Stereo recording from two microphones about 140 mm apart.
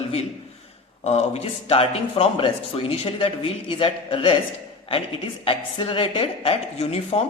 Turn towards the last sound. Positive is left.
turn(degrees=45)  # may be behind; listen again after turning